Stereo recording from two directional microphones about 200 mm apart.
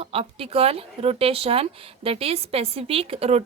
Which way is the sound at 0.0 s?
30° right (ahead or behind).